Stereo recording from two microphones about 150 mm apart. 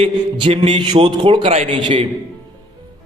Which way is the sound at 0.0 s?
40° right (ahead or behind).